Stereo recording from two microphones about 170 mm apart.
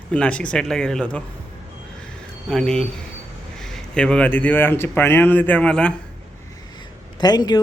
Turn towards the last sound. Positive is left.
turn(degrees=25)  # may be behind; listen again after turning